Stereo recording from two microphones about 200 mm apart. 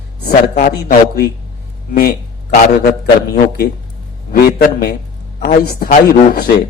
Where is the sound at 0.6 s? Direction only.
50° left (ahead or behind).